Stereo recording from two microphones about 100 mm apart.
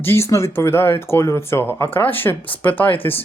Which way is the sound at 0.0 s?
25° left (ahead or behind).